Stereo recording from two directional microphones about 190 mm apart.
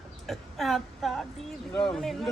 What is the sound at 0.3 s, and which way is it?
Speech, centre (ahead or behind).